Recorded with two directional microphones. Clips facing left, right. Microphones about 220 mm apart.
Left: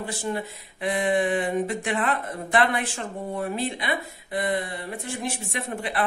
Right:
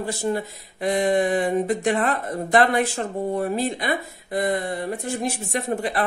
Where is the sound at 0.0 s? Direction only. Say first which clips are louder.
Right 4 dB; 40° right (ahead or behind).